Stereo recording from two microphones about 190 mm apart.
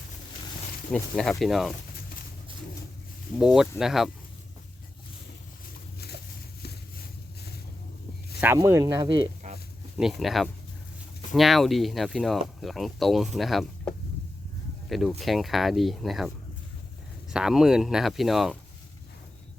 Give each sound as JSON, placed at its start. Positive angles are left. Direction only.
{"t": 0.9, "sound": "speech", "side_deg": 5}
{"t": 3.3, "sound": "speech", "side_deg": -5}
{"t": 8.4, "sound": "speech", "side_deg": -15}
{"t": 9.4, "sound": "a sound", "side_deg": -40}
{"t": 10.0, "sound": "speech", "side_deg": 0}